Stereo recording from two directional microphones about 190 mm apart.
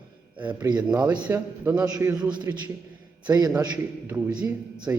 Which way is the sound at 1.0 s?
10° right (ahead or behind).